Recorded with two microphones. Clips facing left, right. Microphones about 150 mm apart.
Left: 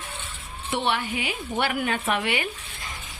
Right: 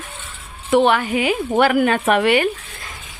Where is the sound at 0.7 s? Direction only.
90° right.